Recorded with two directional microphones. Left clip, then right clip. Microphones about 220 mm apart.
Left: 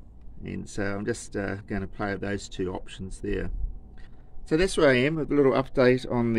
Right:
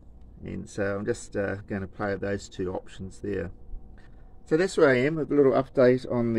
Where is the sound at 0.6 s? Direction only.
5° left (ahead or behind).